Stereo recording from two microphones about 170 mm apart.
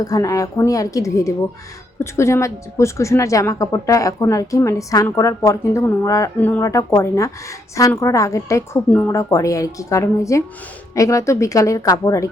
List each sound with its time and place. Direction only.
0.0 s a woman's voice: 20° left (ahead or behind)